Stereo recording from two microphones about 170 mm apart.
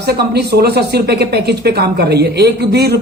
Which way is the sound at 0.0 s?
70° right (ahead or behind).